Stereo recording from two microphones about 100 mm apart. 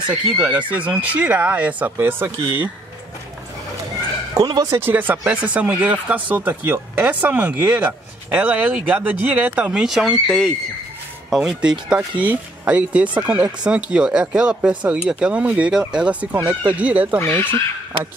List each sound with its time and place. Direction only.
0.1 s speech: 10° right (ahead or behind)
4.3 s speech: 40° right (ahead or behind); by 10.5 s 5° left (ahead or behind)
11.2 s speech: 10° right (ahead or behind)
17.2 s speech: 20° left (ahead or behind)